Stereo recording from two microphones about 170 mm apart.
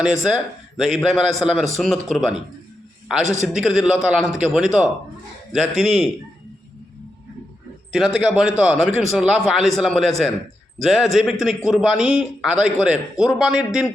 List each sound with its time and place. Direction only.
0.8 s a man's voice: centre (ahead or behind)
7.9 s a man's voice: centre (ahead or behind)